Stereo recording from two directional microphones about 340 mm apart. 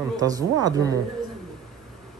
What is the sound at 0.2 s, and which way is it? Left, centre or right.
Speech, centre.